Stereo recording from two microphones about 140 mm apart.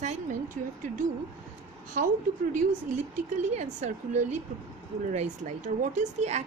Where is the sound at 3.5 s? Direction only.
55° right (ahead or behind).